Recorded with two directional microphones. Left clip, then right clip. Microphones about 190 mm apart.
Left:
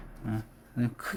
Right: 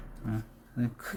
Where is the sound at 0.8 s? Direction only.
20° left (ahead or behind).